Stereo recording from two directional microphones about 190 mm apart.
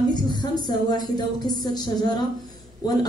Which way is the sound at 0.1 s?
20° left (ahead or behind).